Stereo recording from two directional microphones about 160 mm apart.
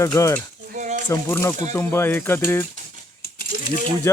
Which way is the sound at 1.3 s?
15° left (ahead or behind).